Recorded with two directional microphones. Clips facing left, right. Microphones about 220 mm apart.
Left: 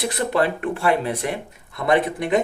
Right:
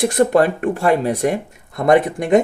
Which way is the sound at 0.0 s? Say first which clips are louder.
Right 7 dB; 45° right (ahead or behind).